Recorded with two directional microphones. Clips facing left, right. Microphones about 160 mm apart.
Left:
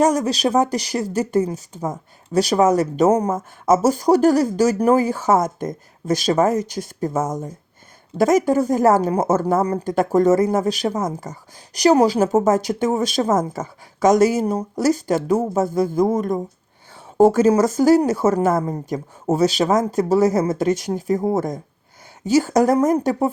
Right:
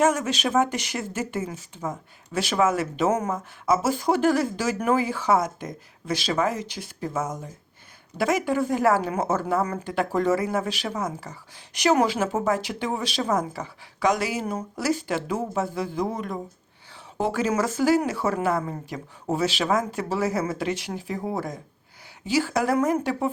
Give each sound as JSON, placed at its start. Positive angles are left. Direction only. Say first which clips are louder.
{"t": 0.0, "sound": "a woman's voice", "louder": "left 5 dB", "side_deg": 35}